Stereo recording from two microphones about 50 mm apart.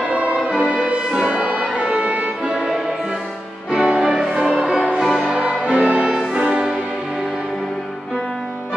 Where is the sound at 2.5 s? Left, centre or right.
Centre.